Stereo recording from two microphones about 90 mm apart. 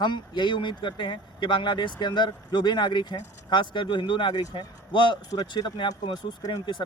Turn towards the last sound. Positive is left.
turn(degrees=55)  # may be behind; listen again after turning